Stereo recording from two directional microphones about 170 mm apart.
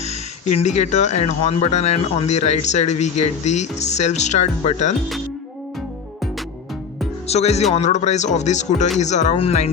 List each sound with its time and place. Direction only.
0.0 s speech: 40° left (ahead or behind)
7.3 s speech: 40° left (ahead or behind)